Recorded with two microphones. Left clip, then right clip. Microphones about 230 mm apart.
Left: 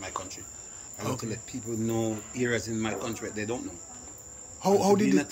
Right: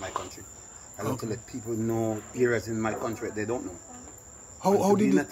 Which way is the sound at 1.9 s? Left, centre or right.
Centre.